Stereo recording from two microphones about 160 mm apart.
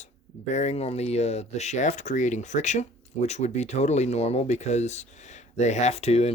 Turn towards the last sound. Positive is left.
turn(degrees=40)  # may be behind; listen again after turning